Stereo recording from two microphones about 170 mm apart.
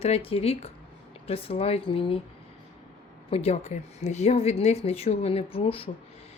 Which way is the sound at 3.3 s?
35° left (ahead or behind).